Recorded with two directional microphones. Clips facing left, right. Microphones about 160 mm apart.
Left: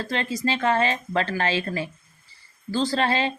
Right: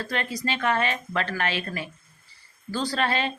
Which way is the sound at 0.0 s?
25° left (ahead or behind).